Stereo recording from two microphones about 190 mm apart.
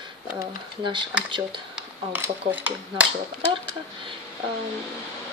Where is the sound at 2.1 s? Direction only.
10° right (ahead or behind).